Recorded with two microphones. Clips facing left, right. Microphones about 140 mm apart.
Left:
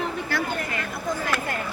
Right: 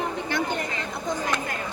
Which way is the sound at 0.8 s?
20° right (ahead or behind).